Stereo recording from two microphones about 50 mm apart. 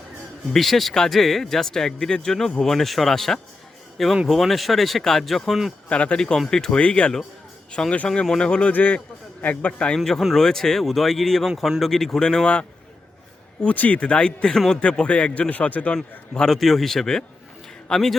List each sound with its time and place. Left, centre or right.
0.5 s speech: centre
5.9 s speech: left
6.8 s speech: left
8.7 s speech: left
10.0 s speech: centre
13.7 s speech: left
16.5 s speech: centre